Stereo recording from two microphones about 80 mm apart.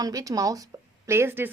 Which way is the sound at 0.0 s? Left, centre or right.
Right.